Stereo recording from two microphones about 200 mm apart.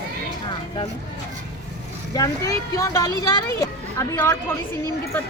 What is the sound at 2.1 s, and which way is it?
Speech, 15° left (ahead or behind).